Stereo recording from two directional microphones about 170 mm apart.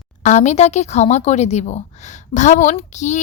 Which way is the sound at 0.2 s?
45° left (ahead or behind).